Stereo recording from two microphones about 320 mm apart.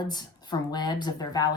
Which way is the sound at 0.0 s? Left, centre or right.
Centre.